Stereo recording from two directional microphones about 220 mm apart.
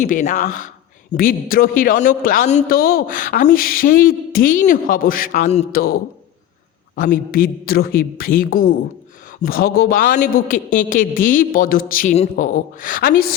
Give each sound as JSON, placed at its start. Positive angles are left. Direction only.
{"t": 0.0, "sound": "a man's voice", "side_deg": 35}